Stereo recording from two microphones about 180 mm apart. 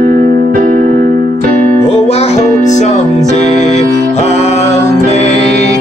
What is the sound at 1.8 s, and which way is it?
Music, 35° left (ahead or behind).